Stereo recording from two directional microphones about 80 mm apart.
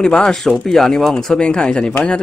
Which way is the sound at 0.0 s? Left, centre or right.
Centre.